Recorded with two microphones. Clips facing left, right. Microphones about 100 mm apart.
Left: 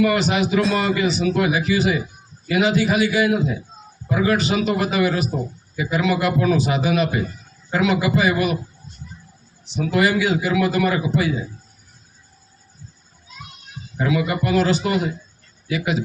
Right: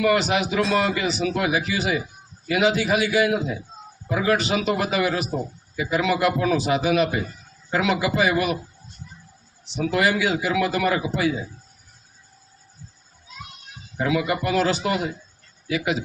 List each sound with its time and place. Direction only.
0.0 s a man's voice: 90° right
5.7 s a man's voice: 75° right (ahead or behind)
9.9 s a man's voice: 85° right
14.0 s a man's voice: 80° right